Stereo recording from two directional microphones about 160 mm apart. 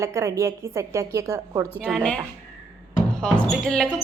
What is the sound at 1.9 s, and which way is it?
Speech, 5° left (ahead or behind).